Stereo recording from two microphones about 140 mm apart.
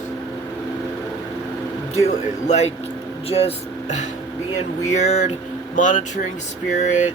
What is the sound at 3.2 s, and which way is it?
Speech, 45° left (ahead or behind).